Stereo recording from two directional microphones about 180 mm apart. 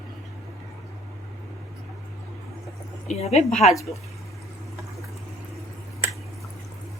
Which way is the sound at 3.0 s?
35° left (ahead or behind).